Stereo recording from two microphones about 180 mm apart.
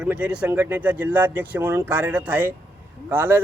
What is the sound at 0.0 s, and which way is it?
A man's voice, 5° right (ahead or behind).